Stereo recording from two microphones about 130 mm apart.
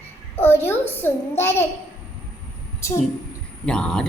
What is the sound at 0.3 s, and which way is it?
A woman's voice, 15° left (ahead or behind).